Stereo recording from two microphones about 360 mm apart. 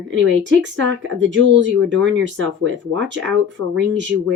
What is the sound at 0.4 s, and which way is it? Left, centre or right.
Speech, right.